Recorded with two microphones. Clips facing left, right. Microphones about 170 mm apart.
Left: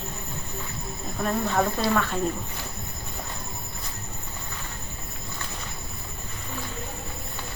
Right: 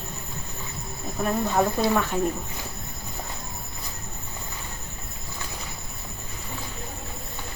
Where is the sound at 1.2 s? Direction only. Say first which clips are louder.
Right 1 dB; 10° right (ahead or behind).